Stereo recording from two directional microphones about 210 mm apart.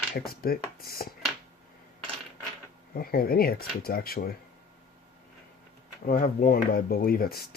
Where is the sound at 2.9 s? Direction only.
45° left (ahead or behind).